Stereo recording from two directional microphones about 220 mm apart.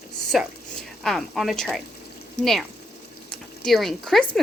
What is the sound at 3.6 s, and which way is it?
Cutlery, centre (ahead or behind).